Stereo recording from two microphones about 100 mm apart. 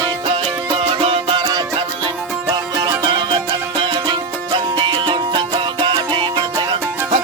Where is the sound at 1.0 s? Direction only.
60° right (ahead or behind).